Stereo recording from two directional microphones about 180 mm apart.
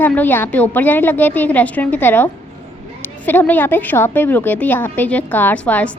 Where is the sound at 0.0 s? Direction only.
10° left (ahead or behind).